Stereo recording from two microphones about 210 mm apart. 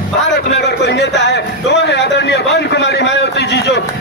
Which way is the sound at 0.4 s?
50° left (ahead or behind).